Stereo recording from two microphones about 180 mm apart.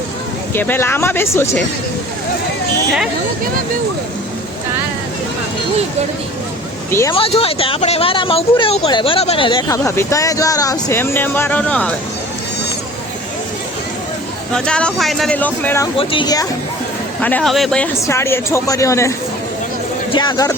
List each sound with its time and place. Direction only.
0.5 s speech: 10° left (ahead or behind)
6.9 s speech: 15° left (ahead or behind)
7.2 s speech: 30° left (ahead or behind); by 11.9 s 5° left (ahead or behind)
14.5 s speech: 5° left (ahead or behind)
16.0 s speech: 25° left (ahead or behind)
17.2 s speech: 5° left (ahead or behind)
18.0 s speech: 15° left (ahead or behind)
20.1 s speech: 25° left (ahead or behind)